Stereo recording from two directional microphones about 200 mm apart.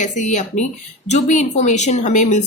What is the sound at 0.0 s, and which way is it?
Speech, 35° left (ahead or behind).